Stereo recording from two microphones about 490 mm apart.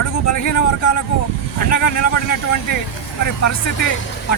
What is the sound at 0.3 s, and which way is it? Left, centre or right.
Speech, left.